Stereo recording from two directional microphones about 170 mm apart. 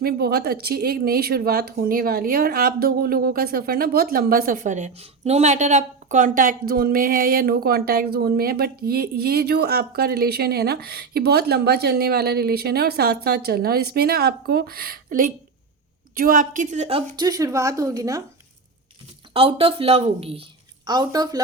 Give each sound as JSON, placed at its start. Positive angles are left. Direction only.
{"t": 0.0, "sound": "a woman's voice", "side_deg": -65}
{"t": 17.2, "sound": "a woman's voice", "side_deg": -20}
{"t": 19.3, "sound": "speech", "side_deg": -35}
{"t": 20.8, "sound": "a woman's voice", "side_deg": -25}